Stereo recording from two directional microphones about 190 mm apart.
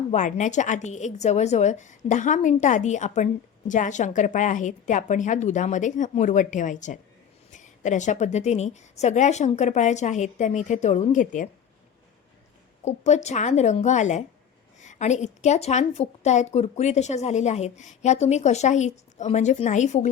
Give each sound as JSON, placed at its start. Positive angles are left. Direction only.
{"t": 0.1, "sound": "a woman's voice", "side_deg": 40}
{"t": 12.8, "sound": "a woman's voice", "side_deg": 35}